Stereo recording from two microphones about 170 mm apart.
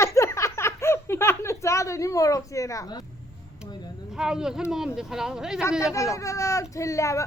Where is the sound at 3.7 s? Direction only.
25° left (ahead or behind).